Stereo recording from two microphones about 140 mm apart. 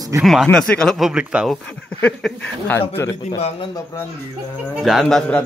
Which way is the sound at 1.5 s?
10° left (ahead or behind).